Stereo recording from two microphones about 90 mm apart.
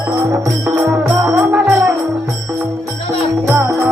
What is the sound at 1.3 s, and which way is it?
Music, 15° right (ahead or behind).